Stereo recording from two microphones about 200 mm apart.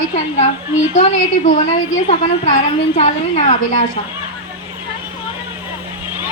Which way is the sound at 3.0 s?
35° left (ahead or behind).